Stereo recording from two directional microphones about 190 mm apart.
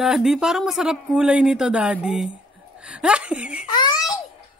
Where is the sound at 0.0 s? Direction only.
Centre (ahead or behind).